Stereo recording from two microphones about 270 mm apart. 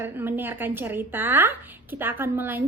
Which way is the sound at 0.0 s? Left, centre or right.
Centre.